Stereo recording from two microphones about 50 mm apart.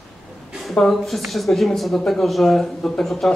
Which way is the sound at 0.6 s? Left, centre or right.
Centre.